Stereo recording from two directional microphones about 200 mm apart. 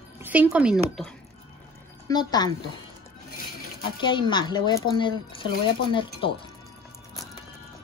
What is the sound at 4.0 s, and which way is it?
Speech, 25° left (ahead or behind).